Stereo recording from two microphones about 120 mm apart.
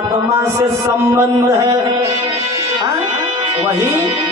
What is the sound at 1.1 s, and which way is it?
Speech, 25° right (ahead or behind).